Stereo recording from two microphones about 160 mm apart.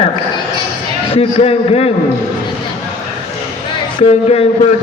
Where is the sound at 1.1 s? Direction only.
40° left (ahead or behind).